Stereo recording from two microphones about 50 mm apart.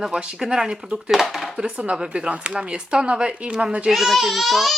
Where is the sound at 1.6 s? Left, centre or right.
Centre.